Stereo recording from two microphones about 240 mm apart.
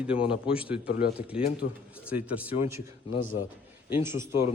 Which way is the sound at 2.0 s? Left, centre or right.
Centre.